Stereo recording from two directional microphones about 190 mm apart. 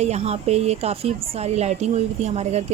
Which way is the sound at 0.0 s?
35° right (ahead or behind).